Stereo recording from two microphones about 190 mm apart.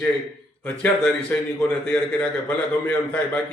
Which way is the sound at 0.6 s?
10° left (ahead or behind).